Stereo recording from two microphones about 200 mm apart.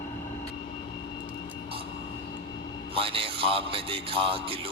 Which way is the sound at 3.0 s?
25° right (ahead or behind).